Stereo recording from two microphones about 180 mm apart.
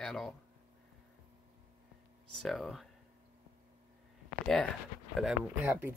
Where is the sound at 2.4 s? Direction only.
Centre (ahead or behind).